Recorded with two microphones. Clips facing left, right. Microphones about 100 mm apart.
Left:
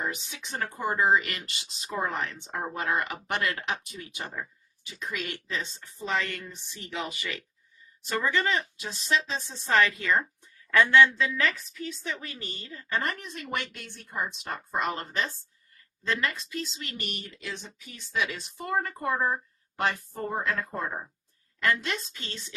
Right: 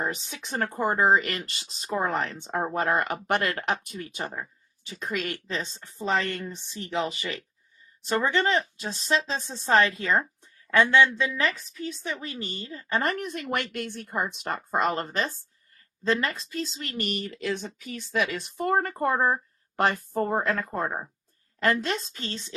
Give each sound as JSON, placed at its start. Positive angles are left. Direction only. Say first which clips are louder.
{"t": 0.0, "sound": "speech", "louder": "right 3 dB", "side_deg": -35}
{"t": 0.4, "sound": "speech", "louder": "right 4 dB", "side_deg": -50}
{"t": 3.6, "sound": "a woman's voice", "louder": "right 5 dB", "side_deg": -55}
{"t": 13.1, "sound": "speech", "louder": "right 5 dB", "side_deg": -60}
{"t": 14.4, "sound": "speech", "louder": "right 6 dB", "side_deg": -50}
{"t": 21.6, "sound": "a woman's voice", "louder": "right 3 dB", "side_deg": -35}